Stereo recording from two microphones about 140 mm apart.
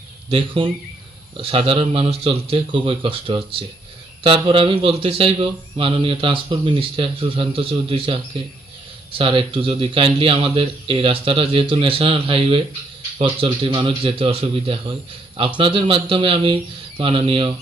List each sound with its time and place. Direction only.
0.3 s speech: 40° right (ahead or behind)